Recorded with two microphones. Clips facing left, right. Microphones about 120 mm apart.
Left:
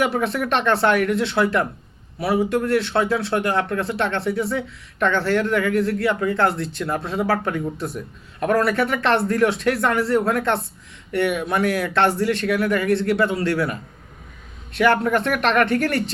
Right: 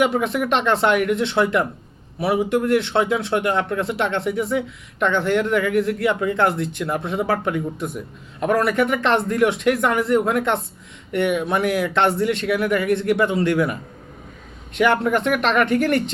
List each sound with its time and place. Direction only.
0.0 s speech: 15° right (ahead or behind)